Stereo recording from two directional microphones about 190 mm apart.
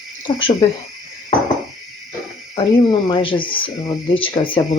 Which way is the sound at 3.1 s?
25° left (ahead or behind).